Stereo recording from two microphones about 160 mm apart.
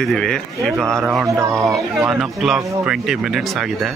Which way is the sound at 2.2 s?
Centre (ahead or behind).